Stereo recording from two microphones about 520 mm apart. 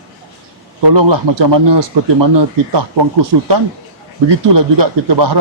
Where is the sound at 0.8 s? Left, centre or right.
Right.